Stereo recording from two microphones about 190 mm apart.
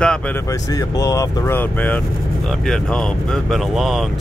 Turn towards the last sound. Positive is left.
turn(degrees=0)  # may be behind; listen again after turning